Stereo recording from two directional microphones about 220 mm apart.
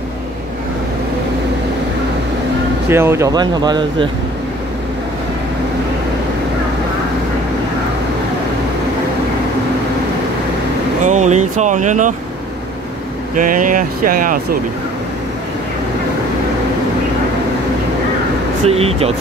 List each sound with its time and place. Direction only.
2.9 s speech: 10° right (ahead or behind)
11.1 s speech: 30° right (ahead or behind)
13.3 s speech: 35° right (ahead or behind)
18.7 s speech: 25° right (ahead or behind)